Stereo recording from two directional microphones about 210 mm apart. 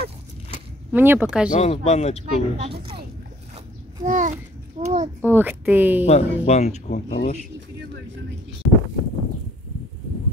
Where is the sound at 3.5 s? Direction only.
20° right (ahead or behind).